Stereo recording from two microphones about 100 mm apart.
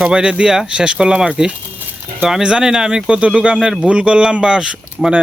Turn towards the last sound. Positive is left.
turn(degrees=-5)  # may be behind; listen again after turning